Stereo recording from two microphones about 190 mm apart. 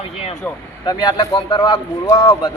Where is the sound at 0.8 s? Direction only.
20° left (ahead or behind).